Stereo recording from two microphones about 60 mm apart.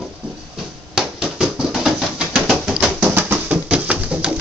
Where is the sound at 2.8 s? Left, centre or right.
Right.